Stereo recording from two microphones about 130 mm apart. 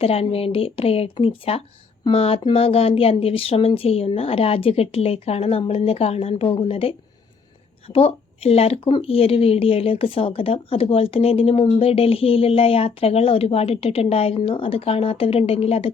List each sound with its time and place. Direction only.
0.0 s speech: 50° left (ahead or behind)